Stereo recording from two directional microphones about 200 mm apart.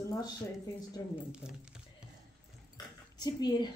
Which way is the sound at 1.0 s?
20° left (ahead or behind).